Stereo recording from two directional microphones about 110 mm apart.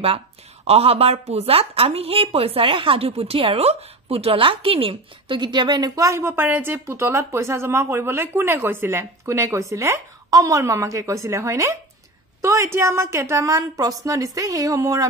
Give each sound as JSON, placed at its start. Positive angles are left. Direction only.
{"t": 0.7, "sound": "a woman's voice", "side_deg": -65}